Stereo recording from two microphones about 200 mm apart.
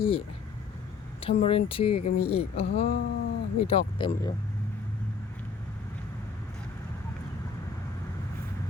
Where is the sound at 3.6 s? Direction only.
30° left (ahead or behind).